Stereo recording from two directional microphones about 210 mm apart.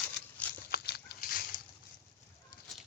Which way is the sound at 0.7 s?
50° left (ahead or behind).